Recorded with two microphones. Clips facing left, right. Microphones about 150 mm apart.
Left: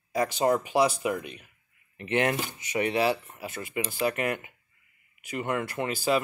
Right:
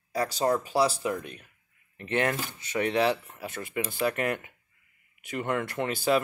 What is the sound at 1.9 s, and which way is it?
Speech, 15° left (ahead or behind).